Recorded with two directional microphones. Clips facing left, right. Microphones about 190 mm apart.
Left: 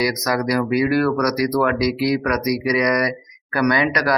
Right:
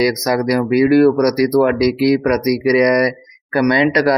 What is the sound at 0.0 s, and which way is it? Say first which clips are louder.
Speech: right 5 dB; 25° right (ahead or behind).